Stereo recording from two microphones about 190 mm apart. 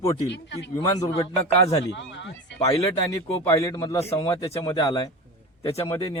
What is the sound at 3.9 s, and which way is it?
Speech, 30° left (ahead or behind).